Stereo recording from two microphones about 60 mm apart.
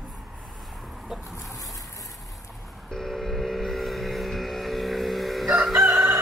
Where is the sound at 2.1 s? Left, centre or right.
Centre.